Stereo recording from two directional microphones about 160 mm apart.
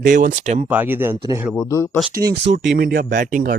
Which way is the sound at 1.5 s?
15° left (ahead or behind).